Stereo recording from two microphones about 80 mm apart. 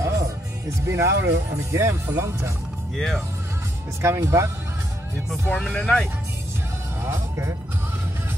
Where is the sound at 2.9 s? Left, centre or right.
Centre.